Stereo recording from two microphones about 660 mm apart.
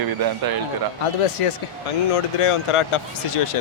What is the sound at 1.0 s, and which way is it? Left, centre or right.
A man's voice, left.